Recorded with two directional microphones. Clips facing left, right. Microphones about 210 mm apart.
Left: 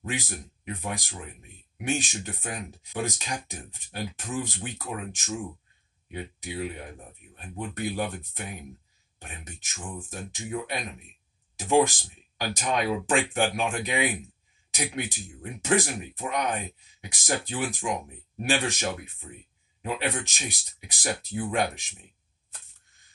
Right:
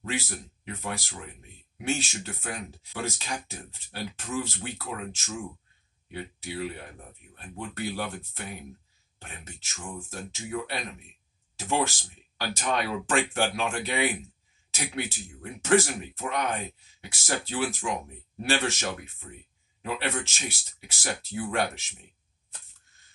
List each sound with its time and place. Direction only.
0.0 s speech: 15° left (ahead or behind)
6.1 s speech: 15° left (ahead or behind)